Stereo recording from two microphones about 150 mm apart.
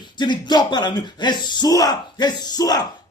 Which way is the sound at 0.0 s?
30° left (ahead or behind).